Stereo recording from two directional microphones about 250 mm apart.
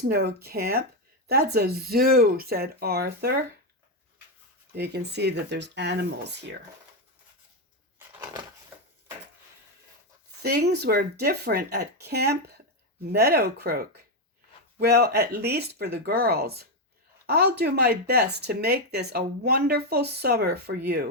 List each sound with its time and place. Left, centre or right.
0.1 s speech: right
4.7 s speech: right
10.4 s speech: right